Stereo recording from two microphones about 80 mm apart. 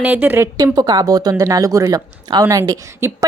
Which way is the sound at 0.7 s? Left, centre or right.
Right.